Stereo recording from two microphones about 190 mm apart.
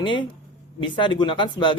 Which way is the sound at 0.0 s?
25° left (ahead or behind).